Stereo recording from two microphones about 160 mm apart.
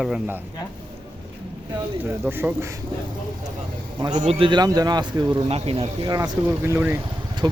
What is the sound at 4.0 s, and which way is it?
Speech, 25° right (ahead or behind).